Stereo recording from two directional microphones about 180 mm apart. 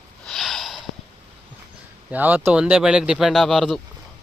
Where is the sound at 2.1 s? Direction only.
10° right (ahead or behind).